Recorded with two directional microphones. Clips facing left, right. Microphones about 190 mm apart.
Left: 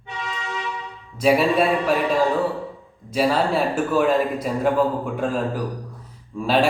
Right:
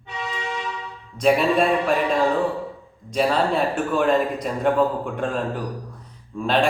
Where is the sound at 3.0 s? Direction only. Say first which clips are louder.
Left 1 dB; 5° left (ahead or behind).